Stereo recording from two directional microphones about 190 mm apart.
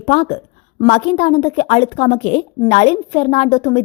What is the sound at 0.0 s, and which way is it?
A woman's voice, 30° left (ahead or behind).